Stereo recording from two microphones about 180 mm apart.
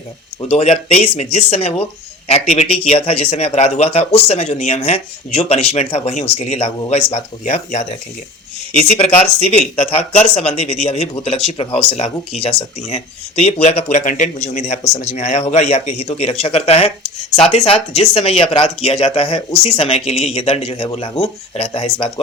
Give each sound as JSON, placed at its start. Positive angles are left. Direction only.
{"t": 0.4, "sound": "speech", "side_deg": 35}